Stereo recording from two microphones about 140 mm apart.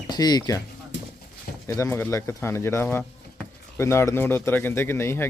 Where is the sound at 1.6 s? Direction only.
20° left (ahead or behind).